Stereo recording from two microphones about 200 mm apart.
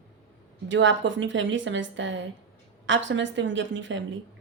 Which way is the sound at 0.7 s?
65° right (ahead or behind).